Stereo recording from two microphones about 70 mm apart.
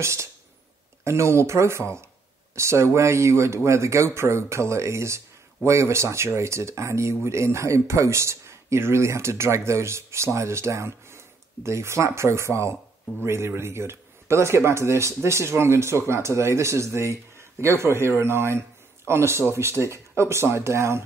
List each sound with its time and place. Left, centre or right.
0.0 s speech: right